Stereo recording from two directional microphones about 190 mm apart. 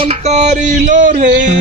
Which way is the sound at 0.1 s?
35° right (ahead or behind).